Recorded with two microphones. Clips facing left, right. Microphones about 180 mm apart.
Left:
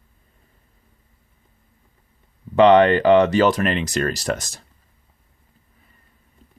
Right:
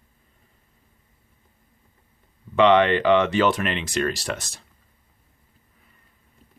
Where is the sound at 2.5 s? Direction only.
40° left (ahead or behind).